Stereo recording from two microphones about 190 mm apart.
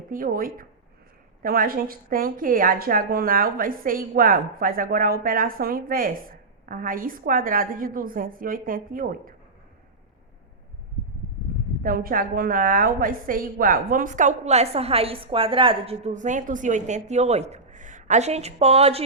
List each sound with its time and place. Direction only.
0.1 s speech: 45° right (ahead or behind)
11.8 s a woman's voice: 50° right (ahead or behind); by 19.0 s 30° right (ahead or behind)